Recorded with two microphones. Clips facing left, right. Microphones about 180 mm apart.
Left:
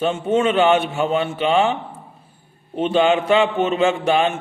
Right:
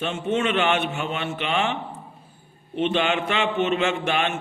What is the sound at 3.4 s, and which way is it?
Speech, 35° left (ahead or behind).